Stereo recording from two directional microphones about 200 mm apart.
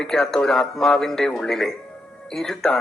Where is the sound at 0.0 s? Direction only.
Centre (ahead or behind).